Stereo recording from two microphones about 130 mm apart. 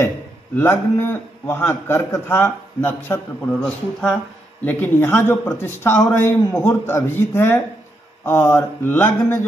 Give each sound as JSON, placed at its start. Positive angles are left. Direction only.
{"t": 0.6, "sound": "a man's voice", "side_deg": 15}